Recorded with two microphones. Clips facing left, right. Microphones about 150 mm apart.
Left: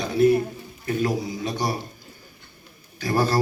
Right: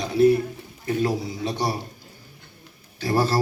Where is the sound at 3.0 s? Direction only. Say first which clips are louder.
Even; 30° right (ahead or behind).